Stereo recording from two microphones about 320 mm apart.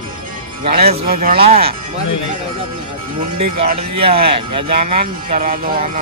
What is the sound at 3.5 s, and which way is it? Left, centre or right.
Speech, centre.